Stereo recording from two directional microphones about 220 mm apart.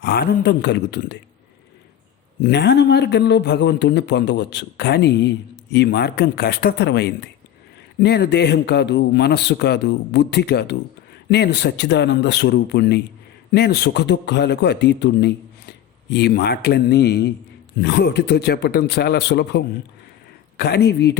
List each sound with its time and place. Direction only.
0.0 s a man's voice: 45° left (ahead or behind)
2.4 s a man's voice: 50° left (ahead or behind)